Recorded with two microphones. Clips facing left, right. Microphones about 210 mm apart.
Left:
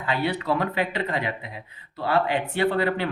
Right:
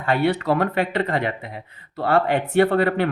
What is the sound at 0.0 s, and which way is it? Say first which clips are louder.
Speech: right 6 dB; 55° right (ahead or behind).